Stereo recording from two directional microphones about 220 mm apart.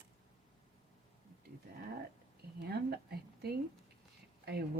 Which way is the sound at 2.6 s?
45° right (ahead or behind).